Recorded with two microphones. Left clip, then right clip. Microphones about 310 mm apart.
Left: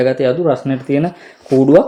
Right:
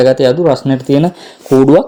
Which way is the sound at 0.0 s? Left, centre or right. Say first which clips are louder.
Right 5 dB; right.